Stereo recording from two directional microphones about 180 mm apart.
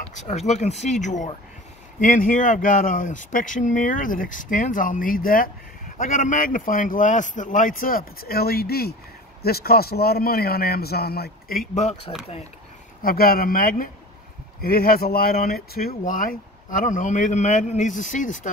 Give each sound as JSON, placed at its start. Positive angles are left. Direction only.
{"t": 0.0, "sound": "a man's voice", "side_deg": 40}
{"t": 13.0, "sound": "a man's voice", "side_deg": 55}